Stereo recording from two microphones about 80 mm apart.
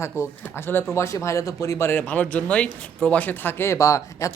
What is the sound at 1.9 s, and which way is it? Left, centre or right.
A woman's voice, left.